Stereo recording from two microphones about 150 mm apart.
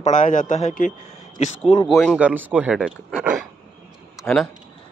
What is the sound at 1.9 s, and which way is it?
Speech, centre (ahead or behind).